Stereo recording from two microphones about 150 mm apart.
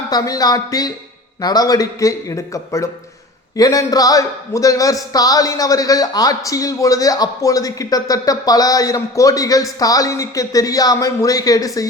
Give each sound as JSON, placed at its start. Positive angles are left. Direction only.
{"t": 0.1, "sound": "a man's voice", "side_deg": 25}